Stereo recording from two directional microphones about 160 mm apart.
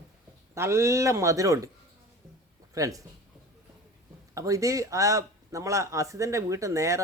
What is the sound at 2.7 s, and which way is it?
Speech, 20° right (ahead or behind).